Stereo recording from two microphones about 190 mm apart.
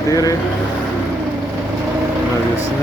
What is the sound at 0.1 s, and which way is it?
Speech, 20° left (ahead or behind).